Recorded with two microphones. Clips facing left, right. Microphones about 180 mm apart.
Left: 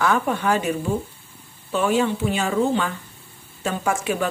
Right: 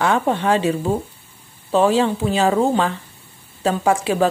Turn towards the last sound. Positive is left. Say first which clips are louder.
# right 5 dB
turn(degrees=-30)  # may be behind; listen again after turning